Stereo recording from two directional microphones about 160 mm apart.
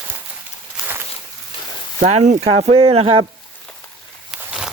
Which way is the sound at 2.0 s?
45° right (ahead or behind).